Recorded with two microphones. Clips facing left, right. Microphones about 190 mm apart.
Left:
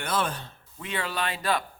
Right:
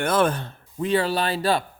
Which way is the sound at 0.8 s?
35° right (ahead or behind).